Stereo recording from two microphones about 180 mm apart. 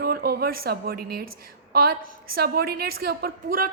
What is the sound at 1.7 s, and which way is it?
A woman's voice, 55° right (ahead or behind).